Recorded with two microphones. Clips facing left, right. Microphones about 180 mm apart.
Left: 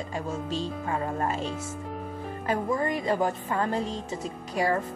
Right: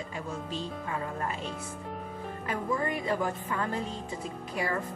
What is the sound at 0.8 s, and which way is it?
Speech, 45° left (ahead or behind).